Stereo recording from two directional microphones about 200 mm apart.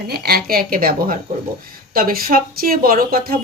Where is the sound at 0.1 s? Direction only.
50° right (ahead or behind).